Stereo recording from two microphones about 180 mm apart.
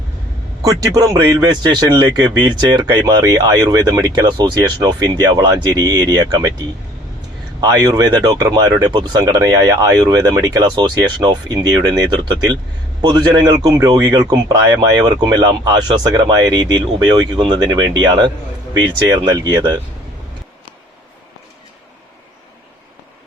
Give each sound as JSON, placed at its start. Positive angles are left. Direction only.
{"t": 0.6, "sound": "a man's voice", "side_deg": -20}
{"t": 7.6, "sound": "a man's voice", "side_deg": -20}